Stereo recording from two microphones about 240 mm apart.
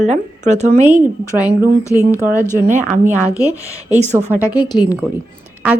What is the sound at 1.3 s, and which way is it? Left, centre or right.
Speech, centre.